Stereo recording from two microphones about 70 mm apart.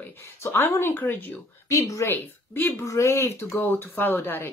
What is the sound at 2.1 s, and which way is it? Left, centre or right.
Speech, left.